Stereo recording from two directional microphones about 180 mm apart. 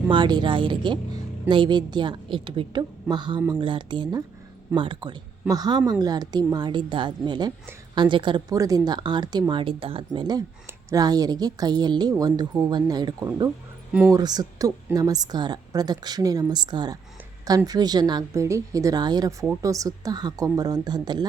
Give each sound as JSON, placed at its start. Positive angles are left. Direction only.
{"t": 0.1, "sound": "a woman's voice", "side_deg": -25}